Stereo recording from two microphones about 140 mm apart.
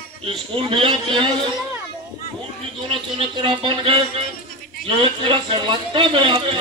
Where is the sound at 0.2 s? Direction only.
40° right (ahead or behind).